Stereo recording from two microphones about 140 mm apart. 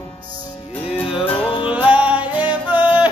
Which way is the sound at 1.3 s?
35° left (ahead or behind).